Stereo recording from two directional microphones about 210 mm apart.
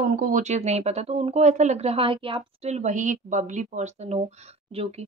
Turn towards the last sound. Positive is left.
turn(degrees=-30)  # may be behind; listen again after turning